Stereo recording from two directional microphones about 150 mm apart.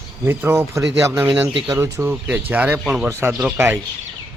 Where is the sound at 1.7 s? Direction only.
20° right (ahead or behind).